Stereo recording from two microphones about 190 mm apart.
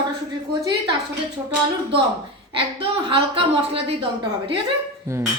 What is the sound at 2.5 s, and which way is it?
Speech, 30° right (ahead or behind).